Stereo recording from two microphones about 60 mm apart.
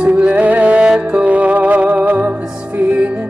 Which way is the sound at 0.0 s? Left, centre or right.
Right.